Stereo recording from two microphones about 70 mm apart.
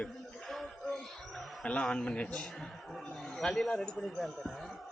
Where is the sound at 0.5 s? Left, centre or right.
Centre.